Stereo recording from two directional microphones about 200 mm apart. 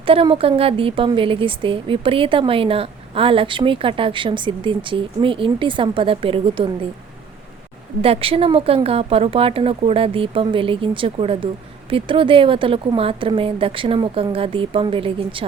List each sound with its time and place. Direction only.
0.0 s speech: 25° right (ahead or behind)
8.0 s speech: 30° right (ahead or behind)